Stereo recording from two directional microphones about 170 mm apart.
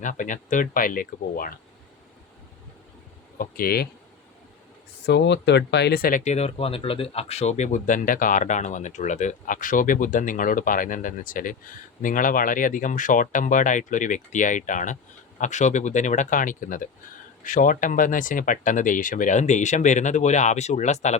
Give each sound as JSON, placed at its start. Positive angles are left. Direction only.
{"t": 0.0, "sound": "speech", "side_deg": 50}
{"t": 3.3, "sound": "speech", "side_deg": 60}
{"t": 5.0, "sound": "speech", "side_deg": 90}